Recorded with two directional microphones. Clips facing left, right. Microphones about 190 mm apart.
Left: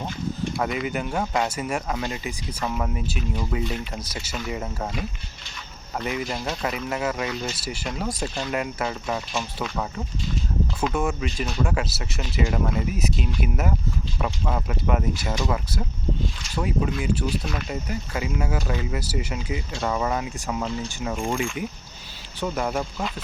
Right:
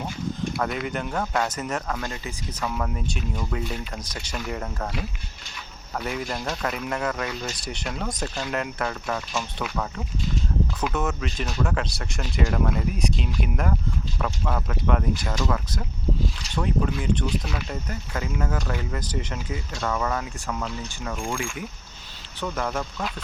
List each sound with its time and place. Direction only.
0.6 s speech: 5° left (ahead or behind)
6.1 s speech: 5° left (ahead or behind)
9.4 s speech: centre (ahead or behind)
10.9 s speech: 10° left (ahead or behind)
22.4 s speech: 15° left (ahead or behind)